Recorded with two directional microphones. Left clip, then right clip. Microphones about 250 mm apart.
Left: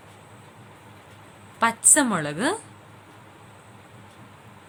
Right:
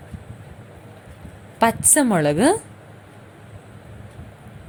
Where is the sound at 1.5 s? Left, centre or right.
Centre.